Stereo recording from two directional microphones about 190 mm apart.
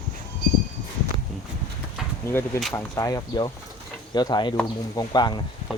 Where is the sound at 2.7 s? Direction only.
15° left (ahead or behind).